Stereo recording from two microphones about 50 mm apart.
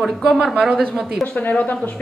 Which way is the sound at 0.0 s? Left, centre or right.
Centre.